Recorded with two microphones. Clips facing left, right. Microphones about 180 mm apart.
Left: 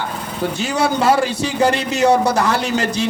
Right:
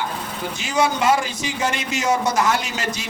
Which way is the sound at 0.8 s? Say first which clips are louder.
Left 3 dB; 35° left (ahead or behind).